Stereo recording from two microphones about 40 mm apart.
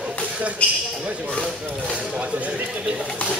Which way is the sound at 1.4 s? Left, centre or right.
Right.